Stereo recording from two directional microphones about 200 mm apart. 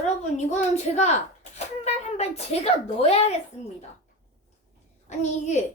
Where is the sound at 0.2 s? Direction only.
35° left (ahead or behind).